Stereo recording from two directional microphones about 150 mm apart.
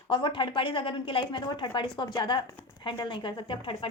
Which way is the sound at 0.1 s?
35° left (ahead or behind).